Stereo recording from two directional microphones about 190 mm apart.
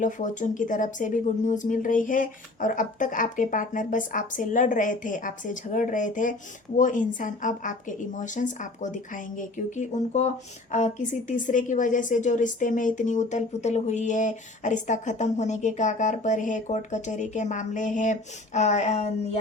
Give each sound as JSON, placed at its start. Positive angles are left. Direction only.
{"t": 0.0, "sound": "a woman's voice", "side_deg": 40}